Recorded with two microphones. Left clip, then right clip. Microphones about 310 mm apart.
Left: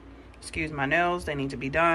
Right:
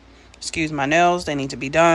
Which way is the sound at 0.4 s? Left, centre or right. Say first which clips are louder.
Right 7 dB; centre.